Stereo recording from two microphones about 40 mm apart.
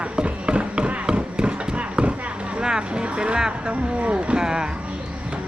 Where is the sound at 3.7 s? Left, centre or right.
Right.